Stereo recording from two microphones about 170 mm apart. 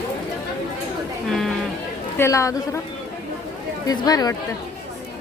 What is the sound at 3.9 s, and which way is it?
Speech, 20° left (ahead or behind).